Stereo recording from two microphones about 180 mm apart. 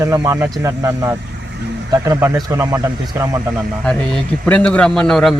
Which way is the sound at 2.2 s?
20° right (ahead or behind).